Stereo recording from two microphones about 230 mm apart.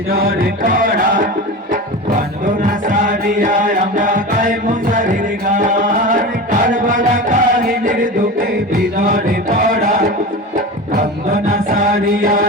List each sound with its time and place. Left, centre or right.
0.1 s music: right
2.4 s music: right